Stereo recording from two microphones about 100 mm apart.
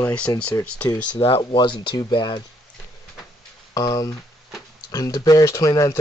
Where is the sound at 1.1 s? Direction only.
60° left (ahead or behind).